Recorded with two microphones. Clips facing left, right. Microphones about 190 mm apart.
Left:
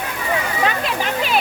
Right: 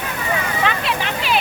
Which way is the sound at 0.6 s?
40° left (ahead or behind).